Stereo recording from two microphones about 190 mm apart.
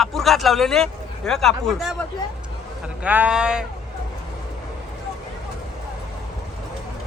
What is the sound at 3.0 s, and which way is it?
Speech, 5° right (ahead or behind).